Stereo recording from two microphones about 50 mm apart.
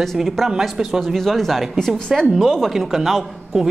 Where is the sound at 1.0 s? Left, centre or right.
Centre.